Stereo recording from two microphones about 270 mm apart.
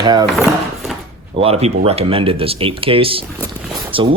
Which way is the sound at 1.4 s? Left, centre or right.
Right.